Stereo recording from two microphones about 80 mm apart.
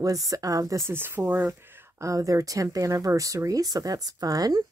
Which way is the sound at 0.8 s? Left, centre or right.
Right.